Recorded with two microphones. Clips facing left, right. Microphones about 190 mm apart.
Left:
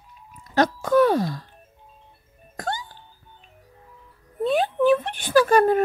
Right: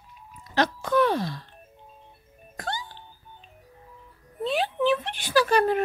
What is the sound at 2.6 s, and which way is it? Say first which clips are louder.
Music: left 4 dB; 45° left (ahead or behind).